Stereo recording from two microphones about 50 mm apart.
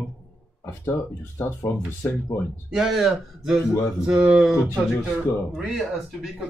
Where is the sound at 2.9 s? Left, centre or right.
Centre.